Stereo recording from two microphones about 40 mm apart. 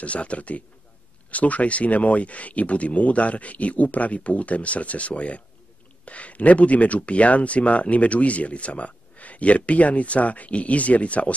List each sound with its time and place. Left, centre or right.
0.0 s speech: left